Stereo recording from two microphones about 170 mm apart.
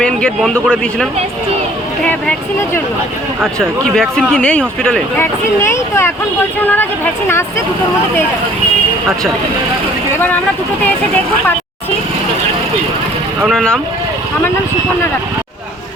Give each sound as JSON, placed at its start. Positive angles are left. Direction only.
{"t": 0.0, "sound": "a man's voice", "side_deg": 5}
{"t": 2.0, "sound": "speech", "side_deg": 10}
{"t": 13.5, "sound": "a man's voice", "side_deg": 5}